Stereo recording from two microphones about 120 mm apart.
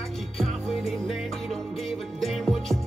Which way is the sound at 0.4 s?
Centre (ahead or behind).